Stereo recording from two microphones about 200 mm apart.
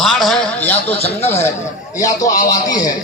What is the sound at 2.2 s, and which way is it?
Speech, 15° left (ahead or behind).